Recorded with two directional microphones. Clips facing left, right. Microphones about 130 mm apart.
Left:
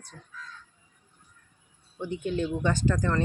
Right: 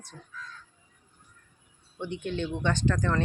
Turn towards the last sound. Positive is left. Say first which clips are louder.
# left 1 dB
turn(degrees=5)  # may be behind; listen again after turning